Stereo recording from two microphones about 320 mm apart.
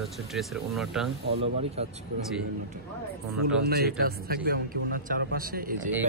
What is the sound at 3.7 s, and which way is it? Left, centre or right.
Speech, right.